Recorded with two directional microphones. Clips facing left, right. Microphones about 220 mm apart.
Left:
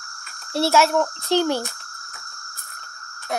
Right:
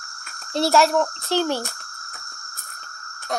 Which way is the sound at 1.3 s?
15° left (ahead or behind).